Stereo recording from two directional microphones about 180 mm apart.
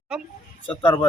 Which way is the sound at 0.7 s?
25° left (ahead or behind).